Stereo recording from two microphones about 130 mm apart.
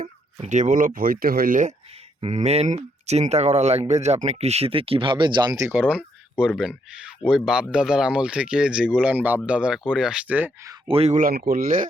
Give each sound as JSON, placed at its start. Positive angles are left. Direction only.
{"t": 0.0, "sound": "speech", "side_deg": -70}
{"t": 1.9, "sound": "speech", "side_deg": -55}
{"t": 5.7, "sound": "speech", "side_deg": -10}
{"t": 10.8, "sound": "speech", "side_deg": -50}
{"t": 11.1, "sound": "speech", "side_deg": -90}